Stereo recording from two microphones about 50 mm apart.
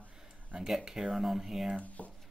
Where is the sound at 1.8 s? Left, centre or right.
Left.